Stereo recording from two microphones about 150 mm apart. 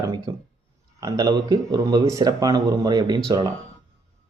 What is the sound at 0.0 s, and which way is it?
Speech, 25° right (ahead or behind).